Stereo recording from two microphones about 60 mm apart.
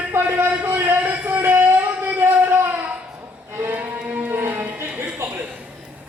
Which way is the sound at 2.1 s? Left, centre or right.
Right.